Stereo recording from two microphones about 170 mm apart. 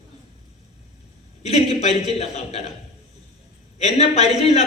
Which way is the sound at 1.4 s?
40° left (ahead or behind).